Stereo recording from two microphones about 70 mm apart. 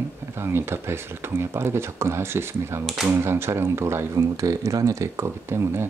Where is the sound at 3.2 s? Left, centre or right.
Right.